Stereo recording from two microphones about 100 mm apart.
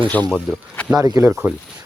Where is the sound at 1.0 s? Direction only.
40° right (ahead or behind).